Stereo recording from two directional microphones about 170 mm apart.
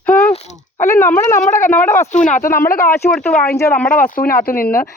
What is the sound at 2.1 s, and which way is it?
Speech, 45° left (ahead or behind).